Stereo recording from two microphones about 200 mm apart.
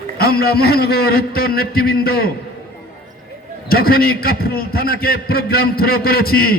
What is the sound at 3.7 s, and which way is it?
A man's voice, 50° left (ahead or behind).